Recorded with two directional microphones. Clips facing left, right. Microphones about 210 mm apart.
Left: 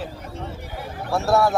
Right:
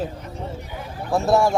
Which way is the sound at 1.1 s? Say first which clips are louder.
Right 2 dB; 15° right (ahead or behind).